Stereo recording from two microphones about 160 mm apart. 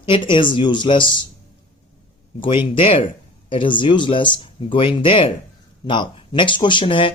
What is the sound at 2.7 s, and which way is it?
Speech, 35° left (ahead or behind).